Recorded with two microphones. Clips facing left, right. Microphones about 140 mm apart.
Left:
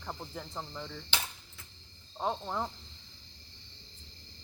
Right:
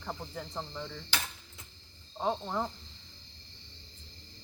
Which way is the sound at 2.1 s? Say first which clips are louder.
Right 2 dB; centre (ahead or behind).